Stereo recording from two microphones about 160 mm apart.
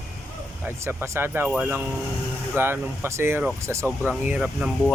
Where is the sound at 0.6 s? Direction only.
15° right (ahead or behind).